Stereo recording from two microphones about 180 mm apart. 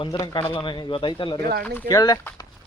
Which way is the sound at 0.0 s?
25° left (ahead or behind).